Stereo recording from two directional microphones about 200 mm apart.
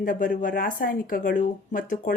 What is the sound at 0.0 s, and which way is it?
Speech, 45° left (ahead or behind).